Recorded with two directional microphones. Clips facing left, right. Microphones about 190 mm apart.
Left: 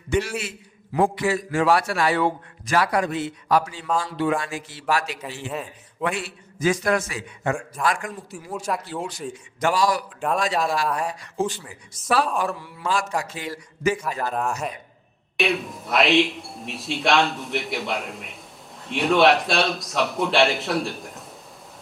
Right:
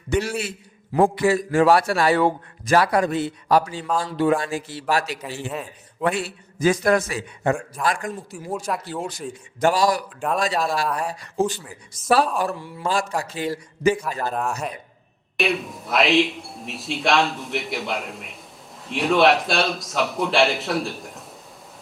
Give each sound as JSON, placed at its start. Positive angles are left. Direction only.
{"t": 0.1, "sound": "a man's voice", "side_deg": -40}
{"t": 5.2, "sound": "speech", "side_deg": 0}
{"t": 6.0, "sound": "a man's voice", "side_deg": -35}
{"t": 8.5, "sound": "speech", "side_deg": 0}
{"t": 9.6, "sound": "a man's voice", "side_deg": -35}
{"t": 10.2, "sound": "speech", "side_deg": 0}
{"t": 12.5, "sound": "a man's voice", "side_deg": -35}
{"t": 13.9, "sound": "speech", "side_deg": 0}